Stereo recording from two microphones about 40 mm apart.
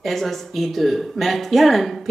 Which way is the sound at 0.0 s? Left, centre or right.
Centre.